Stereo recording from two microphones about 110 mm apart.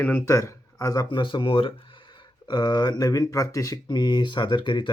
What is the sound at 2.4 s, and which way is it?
Speech, 40° left (ahead or behind).